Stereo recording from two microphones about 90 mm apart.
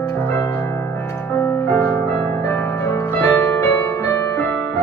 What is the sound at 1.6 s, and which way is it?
Music, 20° left (ahead or behind).